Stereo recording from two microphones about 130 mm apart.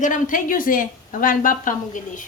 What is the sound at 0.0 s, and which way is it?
A woman's voice, 90° left.